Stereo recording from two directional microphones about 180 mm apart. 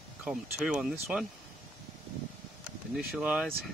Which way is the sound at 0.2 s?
5° right (ahead or behind).